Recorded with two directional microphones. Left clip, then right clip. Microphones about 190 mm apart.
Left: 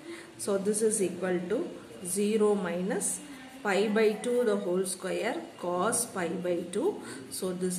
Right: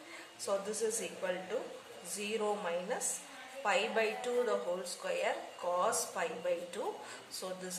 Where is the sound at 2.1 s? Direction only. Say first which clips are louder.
Left 9 dB; 30° left (ahead or behind).